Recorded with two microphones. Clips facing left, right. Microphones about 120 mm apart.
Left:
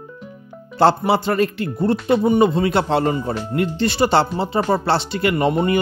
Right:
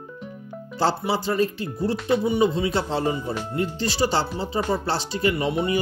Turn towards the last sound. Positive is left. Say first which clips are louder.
# left 5 dB
turn(degrees=60)  # may be behind; listen again after turning